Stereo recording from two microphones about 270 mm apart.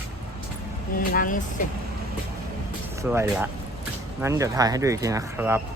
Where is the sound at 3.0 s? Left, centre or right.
Centre.